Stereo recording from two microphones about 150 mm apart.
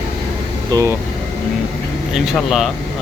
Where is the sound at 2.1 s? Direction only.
Centre (ahead or behind).